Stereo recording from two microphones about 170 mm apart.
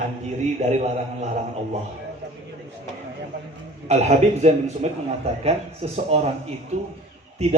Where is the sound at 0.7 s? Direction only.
40° right (ahead or behind).